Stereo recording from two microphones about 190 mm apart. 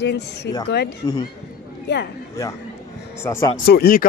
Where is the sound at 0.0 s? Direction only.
65° left (ahead or behind).